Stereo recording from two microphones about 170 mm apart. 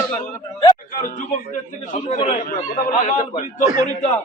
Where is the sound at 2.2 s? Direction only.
50° left (ahead or behind).